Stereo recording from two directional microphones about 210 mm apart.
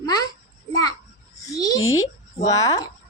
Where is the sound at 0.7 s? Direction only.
20° left (ahead or behind).